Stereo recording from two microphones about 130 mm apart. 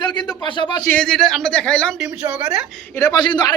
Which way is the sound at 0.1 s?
35° left (ahead or behind).